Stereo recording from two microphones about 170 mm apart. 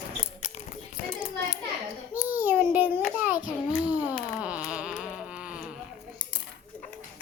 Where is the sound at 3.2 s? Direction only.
10° right (ahead or behind).